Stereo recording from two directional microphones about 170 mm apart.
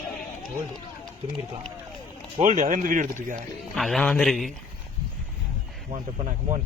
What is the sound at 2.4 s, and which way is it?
Speech, 45° right (ahead or behind).